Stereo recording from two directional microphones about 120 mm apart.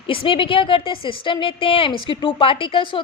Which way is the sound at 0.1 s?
50° left (ahead or behind).